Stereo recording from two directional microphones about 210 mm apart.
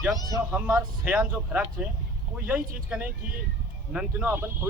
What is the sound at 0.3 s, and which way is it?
Speech, 5° right (ahead or behind).